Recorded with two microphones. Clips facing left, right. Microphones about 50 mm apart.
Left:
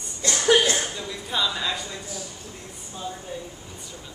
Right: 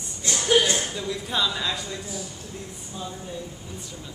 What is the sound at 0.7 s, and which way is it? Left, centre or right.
Speech, centre.